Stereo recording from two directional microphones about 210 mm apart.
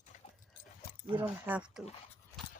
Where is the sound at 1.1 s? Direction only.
10° right (ahead or behind).